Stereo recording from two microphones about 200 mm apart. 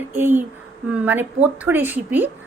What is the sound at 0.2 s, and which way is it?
A woman's voice, 10° right (ahead or behind).